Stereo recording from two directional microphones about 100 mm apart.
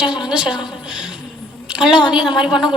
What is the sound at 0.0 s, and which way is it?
Speech, 5° right (ahead or behind).